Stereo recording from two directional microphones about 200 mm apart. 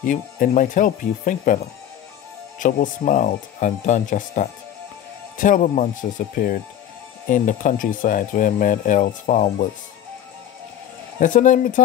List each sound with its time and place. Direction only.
0.0 s speech: 40° left (ahead or behind)
2.6 s speech: 40° left (ahead or behind)
11.1 s speech: 40° left (ahead or behind)